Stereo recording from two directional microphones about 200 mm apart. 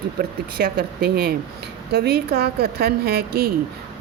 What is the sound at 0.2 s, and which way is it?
A woman's voice, 55° right (ahead or behind).